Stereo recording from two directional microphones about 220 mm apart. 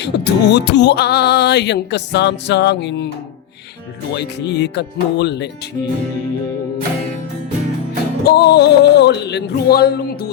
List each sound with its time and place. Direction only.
0.0 s music: 50° left (ahead or behind)
4.1 s music: 50° left (ahead or behind)
8.2 s music: 45° left (ahead or behind)